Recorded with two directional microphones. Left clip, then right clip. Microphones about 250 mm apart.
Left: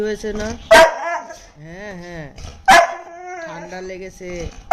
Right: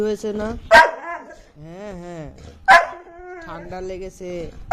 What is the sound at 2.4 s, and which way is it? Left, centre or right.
Dog, centre.